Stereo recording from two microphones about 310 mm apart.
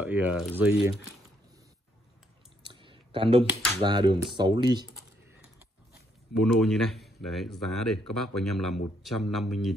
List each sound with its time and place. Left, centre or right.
0.0 s speech: centre
2.6 s a sound: centre
3.4 s speech: centre
6.4 s speech: centre